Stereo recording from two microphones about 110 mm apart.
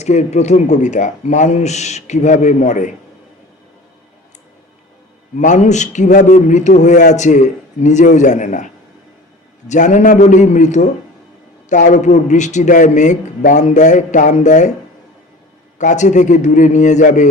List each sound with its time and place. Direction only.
0.0 s a man's voice: 90° left
5.4 s a man's voice: 90° left
9.6 s a man's voice: 90° left
15.8 s a man's voice: 90° left